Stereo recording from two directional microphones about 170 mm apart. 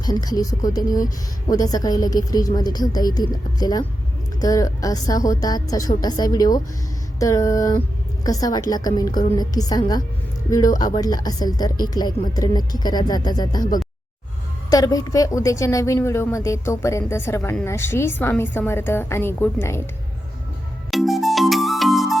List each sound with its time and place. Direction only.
0.0 s speech: 20° left (ahead or behind)
14.7 s a woman's voice: 20° left (ahead or behind)
20.9 s music: centre (ahead or behind)